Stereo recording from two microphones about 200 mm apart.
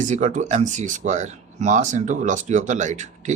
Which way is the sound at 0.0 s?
40° right (ahead or behind).